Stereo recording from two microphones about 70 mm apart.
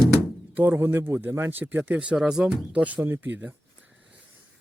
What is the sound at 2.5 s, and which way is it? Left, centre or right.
Speech, right.